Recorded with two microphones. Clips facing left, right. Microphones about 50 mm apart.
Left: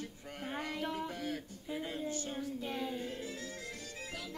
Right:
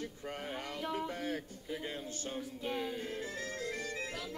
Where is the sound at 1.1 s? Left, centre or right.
Right.